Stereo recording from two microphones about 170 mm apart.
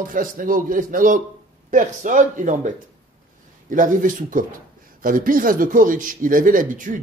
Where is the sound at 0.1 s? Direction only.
55° right (ahead or behind).